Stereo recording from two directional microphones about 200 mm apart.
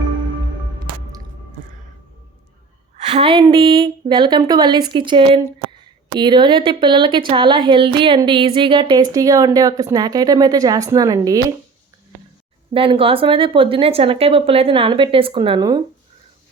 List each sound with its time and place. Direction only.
3.1 s a woman's voice: 25° right (ahead or behind)
12.7 s a woman's voice: 25° right (ahead or behind)